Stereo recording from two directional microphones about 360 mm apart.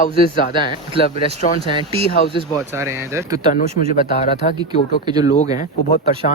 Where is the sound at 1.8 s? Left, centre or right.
Centre.